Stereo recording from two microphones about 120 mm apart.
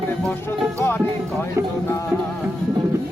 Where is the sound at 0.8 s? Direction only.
20° left (ahead or behind).